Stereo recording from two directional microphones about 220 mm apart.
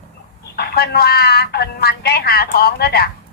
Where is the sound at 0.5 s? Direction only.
45° left (ahead or behind).